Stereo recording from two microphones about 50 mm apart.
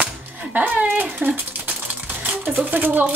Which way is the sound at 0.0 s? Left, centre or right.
Right.